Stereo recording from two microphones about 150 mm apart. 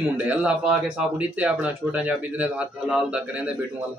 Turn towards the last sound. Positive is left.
turn(degrees=-10)  # may be behind; listen again after turning